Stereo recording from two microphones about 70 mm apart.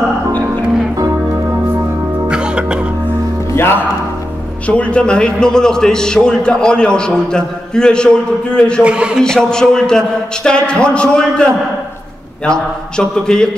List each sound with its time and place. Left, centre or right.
2.2 s music: centre
3.5 s speech: left
4.6 s a man's voice: centre
8.8 s a man's voice: centre
9.2 s a man's voice: centre
12.4 s a man's voice: centre